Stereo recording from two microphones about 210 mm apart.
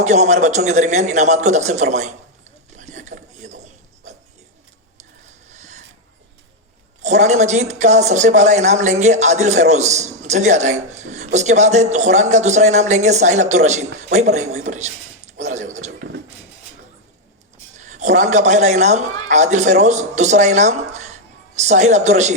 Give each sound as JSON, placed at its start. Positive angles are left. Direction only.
{"t": 0.0, "sound": "speech", "side_deg": -35}
{"t": 2.7, "sound": "a sound", "side_deg": -35}
{"t": 7.0, "sound": "speech", "side_deg": -35}
{"t": 17.7, "sound": "speech", "side_deg": -35}